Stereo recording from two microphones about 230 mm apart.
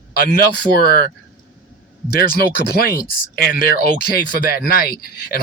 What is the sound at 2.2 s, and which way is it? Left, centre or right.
Speech, left.